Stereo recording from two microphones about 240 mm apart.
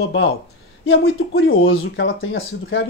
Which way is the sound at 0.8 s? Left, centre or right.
Left.